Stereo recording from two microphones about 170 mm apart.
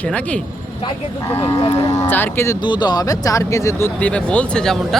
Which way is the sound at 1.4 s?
20° left (ahead or behind).